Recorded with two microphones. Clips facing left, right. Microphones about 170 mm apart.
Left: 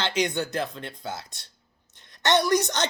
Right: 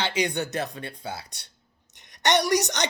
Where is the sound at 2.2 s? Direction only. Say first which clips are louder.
Left 1 dB; 15° right (ahead or behind).